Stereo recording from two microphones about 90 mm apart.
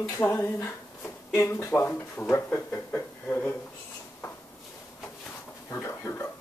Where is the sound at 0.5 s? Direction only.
30° left (ahead or behind).